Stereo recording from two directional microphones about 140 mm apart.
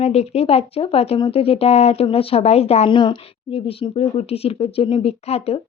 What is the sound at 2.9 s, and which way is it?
Speech, 35° left (ahead or behind).